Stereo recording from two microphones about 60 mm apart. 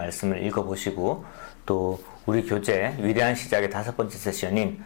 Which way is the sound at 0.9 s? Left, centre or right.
Left.